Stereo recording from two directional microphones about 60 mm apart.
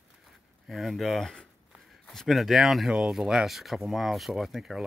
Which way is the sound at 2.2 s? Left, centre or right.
Centre.